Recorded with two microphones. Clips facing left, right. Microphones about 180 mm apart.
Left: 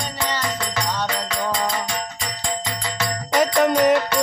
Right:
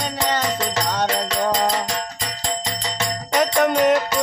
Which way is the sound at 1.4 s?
45° right (ahead or behind).